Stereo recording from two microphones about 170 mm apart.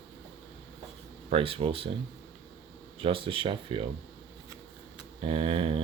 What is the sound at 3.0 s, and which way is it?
Speech, 30° right (ahead or behind).